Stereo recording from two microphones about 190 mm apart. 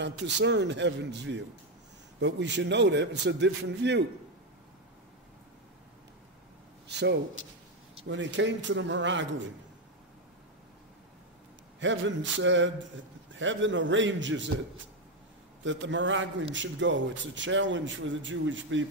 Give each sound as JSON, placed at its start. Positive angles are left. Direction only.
{"t": 0.4, "sound": "a man's voice", "side_deg": -65}
{"t": 6.9, "sound": "a man's voice", "side_deg": -65}
{"t": 11.8, "sound": "a man's voice", "side_deg": -75}
{"t": 15.6, "sound": "a man's voice", "side_deg": -75}